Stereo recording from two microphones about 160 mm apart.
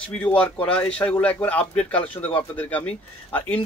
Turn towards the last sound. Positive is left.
turn(degrees=10)  # may be behind; listen again after turning